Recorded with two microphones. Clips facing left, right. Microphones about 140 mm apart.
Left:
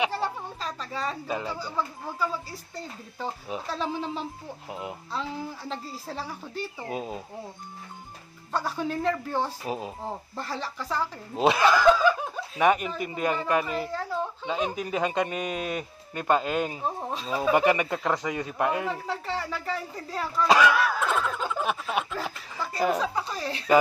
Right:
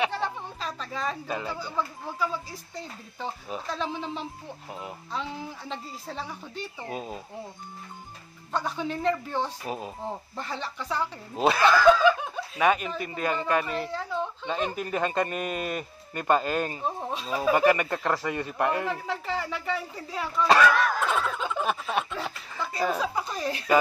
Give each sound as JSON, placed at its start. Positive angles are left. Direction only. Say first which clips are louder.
{"t": 0.0, "sound": "a sound", "louder": "even", "side_deg": 5}
{"t": 0.6, "sound": "a sound", "louder": "even", "side_deg": -5}
{"t": 1.0, "sound": "a man's voice", "louder": "even", "side_deg": 0}
{"t": 4.6, "sound": "speech", "louder": "left 3 dB", "side_deg": 15}
{"t": 8.5, "sound": "a man's voice", "louder": "left 1 dB", "side_deg": 5}
{"t": 11.5, "sound": "speech", "louder": "right 2 dB", "side_deg": 15}
{"t": 12.0, "sound": "snicker", "louder": "right 1 dB", "side_deg": 0}
{"t": 12.5, "sound": "a man's voice", "louder": "left 1 dB", "side_deg": 15}
{"t": 17.5, "sound": "speech", "louder": "right 1 dB", "side_deg": 15}
{"t": 17.7, "sound": "a man's voice", "louder": "left 1 dB", "side_deg": 5}
{"t": 22.9, "sound": "speech", "louder": "left 1 dB", "side_deg": -5}